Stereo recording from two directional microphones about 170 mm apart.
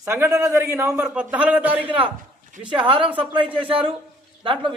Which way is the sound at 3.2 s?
30° right (ahead or behind).